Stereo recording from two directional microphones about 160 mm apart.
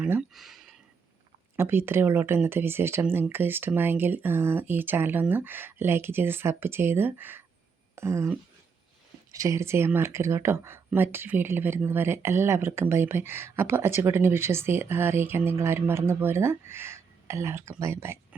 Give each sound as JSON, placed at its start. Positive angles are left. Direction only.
{"t": 0.0, "sound": "speech", "side_deg": -5}
{"t": 1.5, "sound": "speech", "side_deg": -15}